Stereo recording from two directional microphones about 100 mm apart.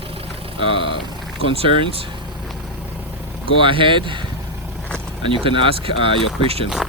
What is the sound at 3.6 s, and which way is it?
Speech, 60° right (ahead or behind).